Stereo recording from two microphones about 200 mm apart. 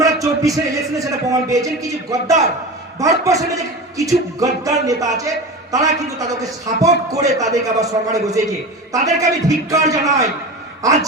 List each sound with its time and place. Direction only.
0.0 s a man's voice: 15° right (ahead or behind)